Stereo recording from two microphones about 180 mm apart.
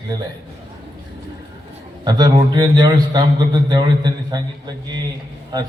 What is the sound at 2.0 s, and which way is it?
A man's voice, 20° right (ahead or behind).